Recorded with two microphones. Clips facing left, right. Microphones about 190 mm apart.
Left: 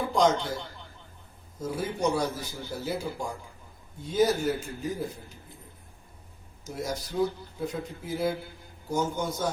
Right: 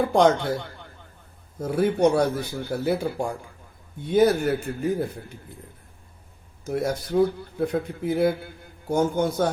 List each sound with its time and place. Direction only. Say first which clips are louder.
0.0 s a man's voice: right 5 dB; 60° right (ahead or behind)
6.7 s a man's voice: right 8 dB; 60° right (ahead or behind)